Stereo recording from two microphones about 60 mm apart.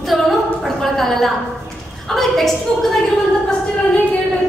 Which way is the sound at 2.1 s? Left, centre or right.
Centre.